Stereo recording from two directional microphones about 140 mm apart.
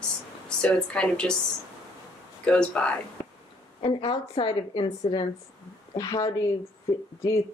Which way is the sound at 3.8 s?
35° left (ahead or behind).